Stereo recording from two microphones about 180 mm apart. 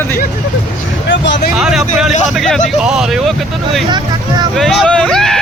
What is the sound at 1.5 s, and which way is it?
Vehicle, 5° right (ahead or behind).